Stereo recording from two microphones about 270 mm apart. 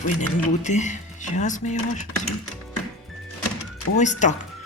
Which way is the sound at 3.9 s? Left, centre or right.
Left.